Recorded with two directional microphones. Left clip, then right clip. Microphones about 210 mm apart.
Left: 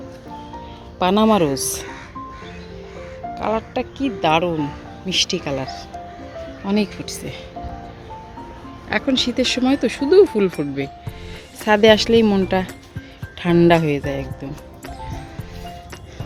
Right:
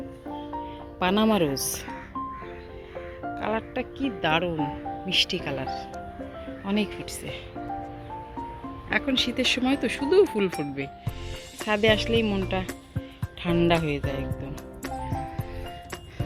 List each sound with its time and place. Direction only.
0.9 s speech: centre (ahead or behind)
3.3 s speech: centre (ahead or behind)
8.9 s speech: 5° left (ahead or behind)
11.6 s speech: 20° left (ahead or behind)